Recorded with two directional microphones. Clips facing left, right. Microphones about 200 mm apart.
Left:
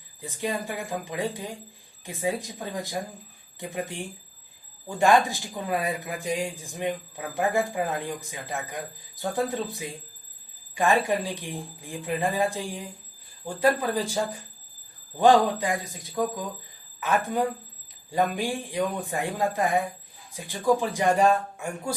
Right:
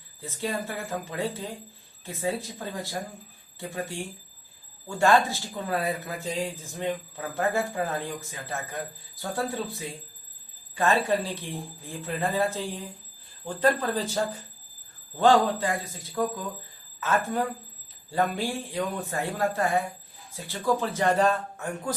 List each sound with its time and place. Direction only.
0.2 s speech: 15° left (ahead or behind)